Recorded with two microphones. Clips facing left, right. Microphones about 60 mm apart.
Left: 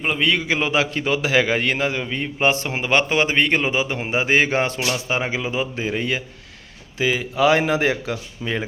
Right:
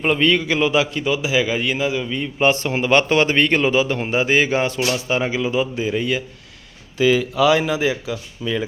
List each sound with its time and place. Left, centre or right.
0.2 s a man's voice: centre; by 4.8 s left
4.9 s a man's voice: left